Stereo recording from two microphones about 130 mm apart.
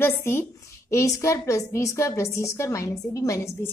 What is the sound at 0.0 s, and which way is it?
A woman's voice, 20° left (ahead or behind).